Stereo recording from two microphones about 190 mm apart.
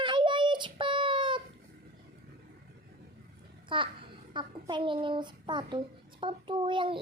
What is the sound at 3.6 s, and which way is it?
A child's voice, 25° right (ahead or behind).